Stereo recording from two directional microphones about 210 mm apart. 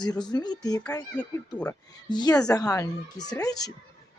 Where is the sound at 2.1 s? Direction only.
20° left (ahead or behind).